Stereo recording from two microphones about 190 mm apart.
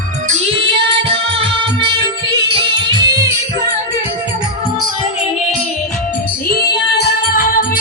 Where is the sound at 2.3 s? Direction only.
25° right (ahead or behind).